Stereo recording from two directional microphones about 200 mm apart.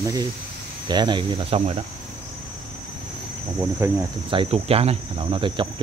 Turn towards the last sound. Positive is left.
turn(degrees=-25)  # may be behind; listen again after turning